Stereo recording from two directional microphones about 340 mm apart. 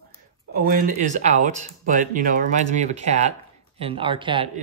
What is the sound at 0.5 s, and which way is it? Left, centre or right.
Speech, right.